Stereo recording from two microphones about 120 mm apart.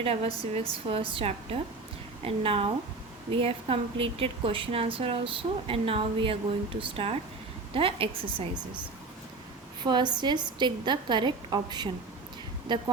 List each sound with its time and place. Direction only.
0.0 s a woman's voice: 55° right (ahead or behind)
9.8 s a woman's voice: 40° right (ahead or behind)